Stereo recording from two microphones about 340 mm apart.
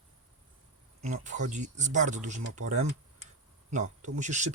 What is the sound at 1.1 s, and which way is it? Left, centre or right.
Speech, right.